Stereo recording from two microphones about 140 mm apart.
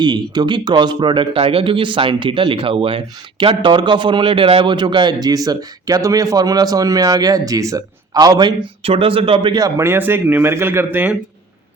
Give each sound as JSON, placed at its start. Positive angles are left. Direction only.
{"t": 0.0, "sound": "a man's voice", "side_deg": -30}
{"t": 8.8, "sound": "a man's voice", "side_deg": -40}